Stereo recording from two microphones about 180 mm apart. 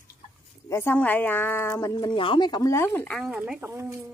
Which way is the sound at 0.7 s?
15° left (ahead or behind).